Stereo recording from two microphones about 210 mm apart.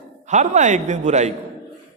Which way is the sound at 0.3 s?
35° right (ahead or behind).